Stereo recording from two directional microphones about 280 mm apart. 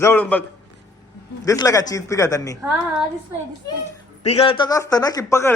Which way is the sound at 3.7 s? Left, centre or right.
Centre.